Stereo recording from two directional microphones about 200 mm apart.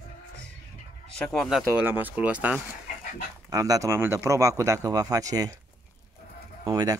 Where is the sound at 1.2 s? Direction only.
Centre (ahead or behind).